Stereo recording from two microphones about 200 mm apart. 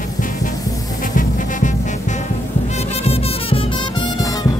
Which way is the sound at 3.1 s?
30° left (ahead or behind).